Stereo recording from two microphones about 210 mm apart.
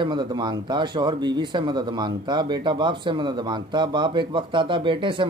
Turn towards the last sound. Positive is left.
turn(degrees=-25)  # may be behind; listen again after turning